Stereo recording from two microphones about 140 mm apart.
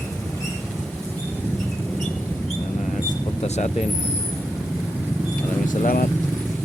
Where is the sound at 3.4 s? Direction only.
55° left (ahead or behind).